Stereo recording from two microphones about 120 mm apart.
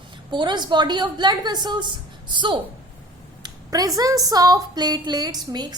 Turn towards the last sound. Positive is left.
turn(degrees=-35)  # may be behind; listen again after turning